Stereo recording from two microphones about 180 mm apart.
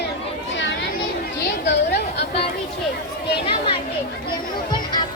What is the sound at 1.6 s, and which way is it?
Chatter, 75° left (ahead or behind).